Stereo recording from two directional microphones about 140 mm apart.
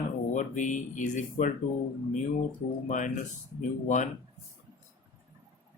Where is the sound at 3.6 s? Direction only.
60° left (ahead or behind).